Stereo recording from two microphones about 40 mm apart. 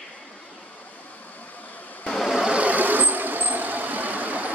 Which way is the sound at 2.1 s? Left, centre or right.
Centre.